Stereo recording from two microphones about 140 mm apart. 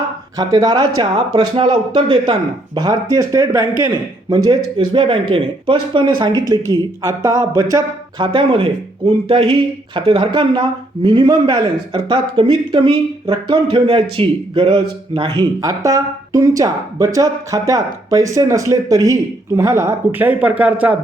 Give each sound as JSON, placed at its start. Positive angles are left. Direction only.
{"t": 0.3, "sound": "speech", "side_deg": -30}